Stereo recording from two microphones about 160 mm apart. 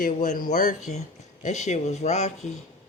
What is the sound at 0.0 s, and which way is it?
Speech, 55° left (ahead or behind).